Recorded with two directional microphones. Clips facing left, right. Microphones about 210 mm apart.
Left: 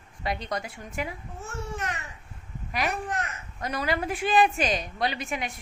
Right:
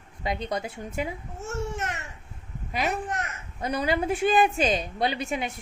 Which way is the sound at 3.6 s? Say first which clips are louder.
Right 3 dB; 25° right (ahead or behind).